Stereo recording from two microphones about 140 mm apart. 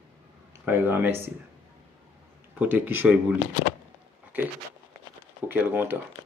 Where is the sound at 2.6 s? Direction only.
10° right (ahead or behind).